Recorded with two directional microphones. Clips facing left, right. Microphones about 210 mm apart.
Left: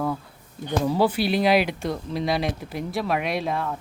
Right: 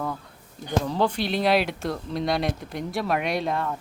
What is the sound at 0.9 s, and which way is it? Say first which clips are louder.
Speech: left 6 dB; 5° left (ahead or behind).